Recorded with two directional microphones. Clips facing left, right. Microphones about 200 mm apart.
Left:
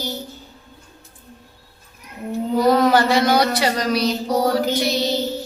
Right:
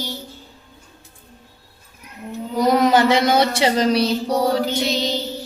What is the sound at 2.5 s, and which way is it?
Speech, 20° right (ahead or behind).